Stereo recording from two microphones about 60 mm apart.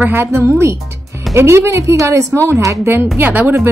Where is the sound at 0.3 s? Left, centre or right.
Right.